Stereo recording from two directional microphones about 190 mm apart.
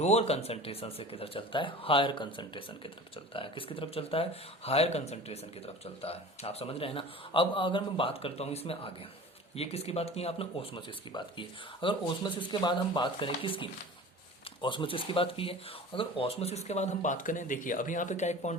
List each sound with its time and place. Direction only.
0.0 s speech: 35° left (ahead or behind)